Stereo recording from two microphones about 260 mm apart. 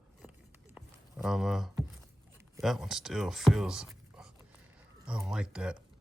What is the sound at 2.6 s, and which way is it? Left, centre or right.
Speech, centre.